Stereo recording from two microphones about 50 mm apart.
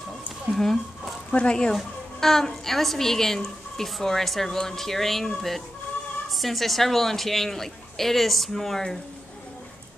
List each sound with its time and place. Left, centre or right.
0.5 s a woman's voice: centre
1.3 s a woman's voice: centre